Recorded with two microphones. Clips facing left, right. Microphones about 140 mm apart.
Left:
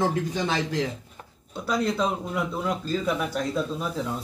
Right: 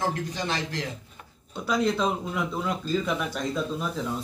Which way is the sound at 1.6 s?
5° left (ahead or behind).